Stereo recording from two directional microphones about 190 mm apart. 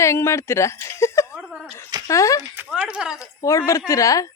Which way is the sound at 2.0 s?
15° left (ahead or behind).